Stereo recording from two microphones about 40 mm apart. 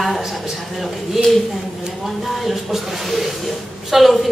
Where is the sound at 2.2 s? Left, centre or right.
Centre.